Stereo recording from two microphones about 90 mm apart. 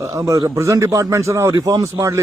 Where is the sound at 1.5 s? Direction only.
45° right (ahead or behind).